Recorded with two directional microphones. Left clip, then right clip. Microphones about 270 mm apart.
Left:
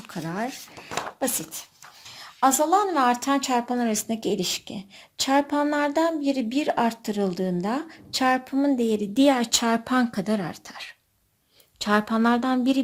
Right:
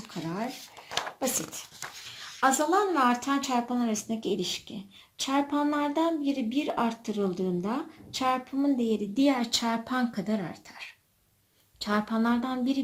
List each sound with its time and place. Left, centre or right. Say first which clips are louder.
0.1 s speech: left 4 dB; left
2.0 s speech: left 4 dB; left